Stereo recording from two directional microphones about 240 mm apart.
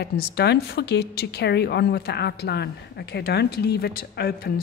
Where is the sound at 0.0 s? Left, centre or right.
Left.